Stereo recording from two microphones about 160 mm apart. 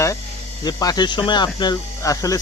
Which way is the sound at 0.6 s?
25° left (ahead or behind).